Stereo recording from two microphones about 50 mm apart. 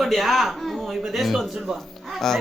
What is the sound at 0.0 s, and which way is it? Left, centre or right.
Speech, centre.